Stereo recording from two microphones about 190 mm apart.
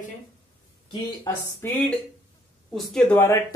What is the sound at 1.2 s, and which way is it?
Speech, 10° left (ahead or behind).